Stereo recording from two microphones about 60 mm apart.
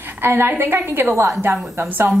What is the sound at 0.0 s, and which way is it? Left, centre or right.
A woman's voice, right.